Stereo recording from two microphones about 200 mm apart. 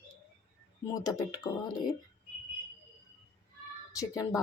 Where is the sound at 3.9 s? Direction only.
15° left (ahead or behind).